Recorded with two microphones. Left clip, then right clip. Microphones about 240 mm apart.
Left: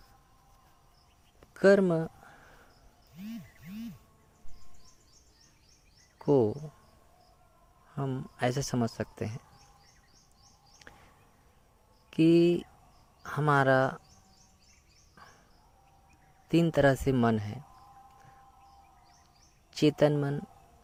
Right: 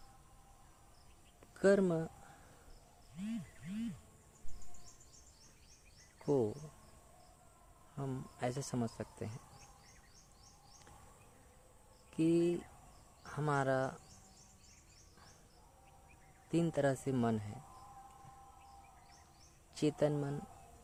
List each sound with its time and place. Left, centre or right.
1.4 s a sound: left
6.1 s speech: left
7.9 s speech: left
12.1 s speech: left
16.5 s speech: left
19.7 s speech: left